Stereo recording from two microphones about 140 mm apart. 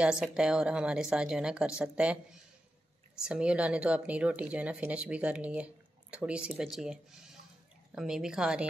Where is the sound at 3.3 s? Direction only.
5° right (ahead or behind).